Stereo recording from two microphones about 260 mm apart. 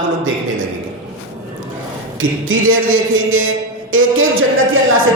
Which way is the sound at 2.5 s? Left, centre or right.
Right.